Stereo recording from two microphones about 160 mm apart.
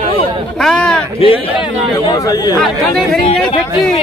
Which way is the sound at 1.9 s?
25° left (ahead or behind).